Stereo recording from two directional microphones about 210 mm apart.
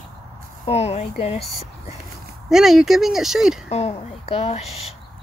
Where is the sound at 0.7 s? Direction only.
30° left (ahead or behind).